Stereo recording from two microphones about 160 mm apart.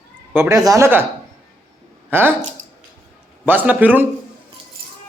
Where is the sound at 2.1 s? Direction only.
10° right (ahead or behind).